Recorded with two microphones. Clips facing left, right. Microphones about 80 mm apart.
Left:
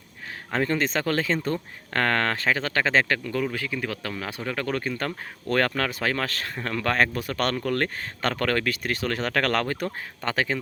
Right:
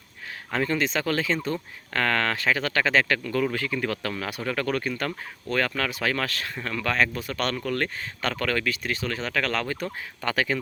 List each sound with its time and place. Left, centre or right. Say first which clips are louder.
0.5 s speech: left 1 dB; left
5.5 s speech: left 2 dB; left
10.2 s speech: even; left